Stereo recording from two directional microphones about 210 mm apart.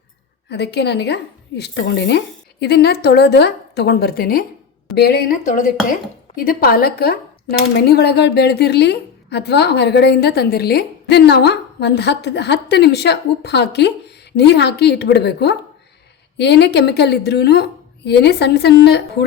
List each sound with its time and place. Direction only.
0.5 s speech: 50° left (ahead or behind)